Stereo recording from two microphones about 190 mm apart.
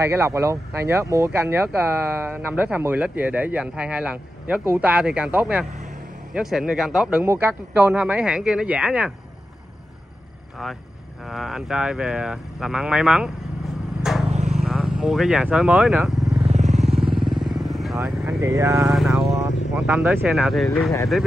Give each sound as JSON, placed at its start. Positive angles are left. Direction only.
{"t": 0.0, "sound": "speech", "side_deg": -15}
{"t": 11.2, "sound": "speech", "side_deg": 0}
{"t": 14.1, "sound": "vehicle", "side_deg": 0}
{"t": 14.5, "sound": "speech", "side_deg": 0}
{"t": 16.4, "sound": "vehicle", "side_deg": -35}
{"t": 17.1, "sound": "vehicle", "side_deg": 0}
{"t": 17.9, "sound": "speech", "side_deg": -15}
{"t": 18.9, "sound": "vehicle", "side_deg": 0}
{"t": 19.7, "sound": "speech", "side_deg": 0}